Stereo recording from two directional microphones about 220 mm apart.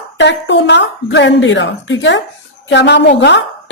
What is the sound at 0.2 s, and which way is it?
A woman's voice, 55° left (ahead or behind).